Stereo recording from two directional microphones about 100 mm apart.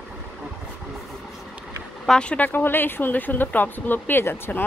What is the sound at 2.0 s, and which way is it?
Speech, 10° left (ahead or behind).